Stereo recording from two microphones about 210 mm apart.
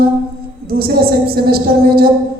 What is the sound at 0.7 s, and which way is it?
A woman's voice, 45° right (ahead or behind).